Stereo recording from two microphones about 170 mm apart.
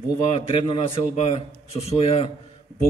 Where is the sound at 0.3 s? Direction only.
30° left (ahead or behind).